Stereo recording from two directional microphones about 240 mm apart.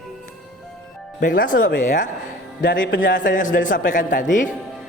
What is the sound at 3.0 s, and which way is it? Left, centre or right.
A man's voice, left.